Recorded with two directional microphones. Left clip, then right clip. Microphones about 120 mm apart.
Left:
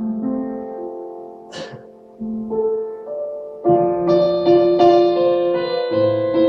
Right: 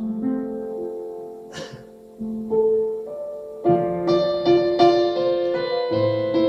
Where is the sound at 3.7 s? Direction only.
15° right (ahead or behind).